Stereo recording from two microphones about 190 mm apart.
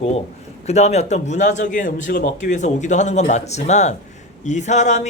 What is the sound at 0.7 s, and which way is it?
Speech, 35° left (ahead or behind).